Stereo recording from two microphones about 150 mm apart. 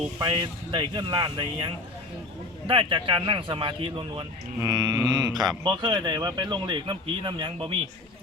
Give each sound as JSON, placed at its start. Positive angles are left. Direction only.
{"t": 0.2, "sound": "speech", "side_deg": -25}
{"t": 4.6, "sound": "speech", "side_deg": -25}